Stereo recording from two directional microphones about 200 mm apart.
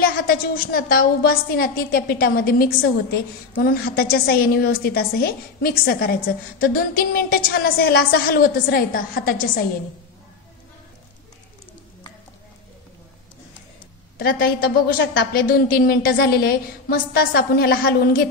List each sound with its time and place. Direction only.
0.0 s a woman's voice: 45° left (ahead or behind)
14.1 s a woman's voice: 50° left (ahead or behind)
15.5 s a woman's voice: 50° left (ahead or behind)